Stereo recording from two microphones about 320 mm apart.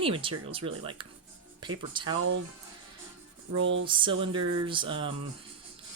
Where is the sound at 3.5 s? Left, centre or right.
Right.